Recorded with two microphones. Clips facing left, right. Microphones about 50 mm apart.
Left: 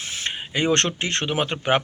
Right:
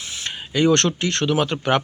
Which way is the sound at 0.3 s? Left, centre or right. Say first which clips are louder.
Right 4 dB; left.